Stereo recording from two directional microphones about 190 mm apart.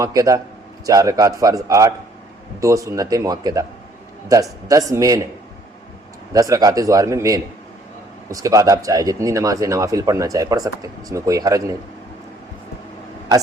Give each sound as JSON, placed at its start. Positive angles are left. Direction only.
{"t": 0.0, "sound": "speech", "side_deg": -15}
{"t": 6.3, "sound": "speech", "side_deg": -20}